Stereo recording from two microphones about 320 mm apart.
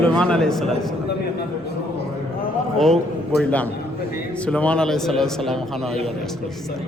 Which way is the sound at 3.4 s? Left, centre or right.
Centre.